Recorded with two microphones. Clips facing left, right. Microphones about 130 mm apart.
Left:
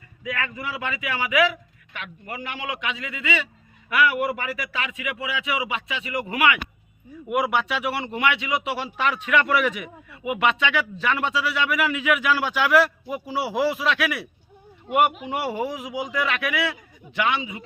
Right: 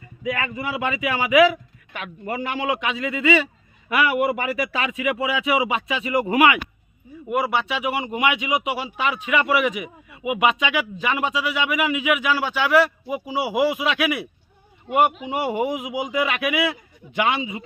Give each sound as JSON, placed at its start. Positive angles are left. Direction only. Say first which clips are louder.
{"t": 0.3, "sound": "a man's voice", "louder": "right 4 dB", "side_deg": -15}
{"t": 7.3, "sound": "a man's voice", "louder": "right 1 dB", "side_deg": 0}
{"t": 8.8, "sound": "a man's voice", "louder": "even", "side_deg": -5}
{"t": 15.4, "sound": "a man's voice", "louder": "right 5 dB", "side_deg": -15}